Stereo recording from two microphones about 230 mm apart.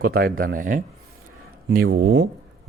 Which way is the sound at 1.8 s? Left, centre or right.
Right.